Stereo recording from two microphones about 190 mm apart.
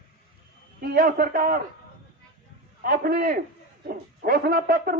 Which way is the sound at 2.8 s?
45° right (ahead or behind).